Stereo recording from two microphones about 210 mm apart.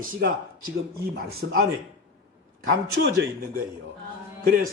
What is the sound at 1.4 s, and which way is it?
Speech, 60° right (ahead or behind).